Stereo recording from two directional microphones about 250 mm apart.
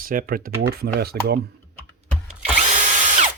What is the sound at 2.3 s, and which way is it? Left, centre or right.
Drill, right.